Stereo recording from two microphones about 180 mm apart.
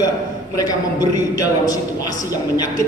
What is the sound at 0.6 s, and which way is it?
A man's voice, 20° left (ahead or behind).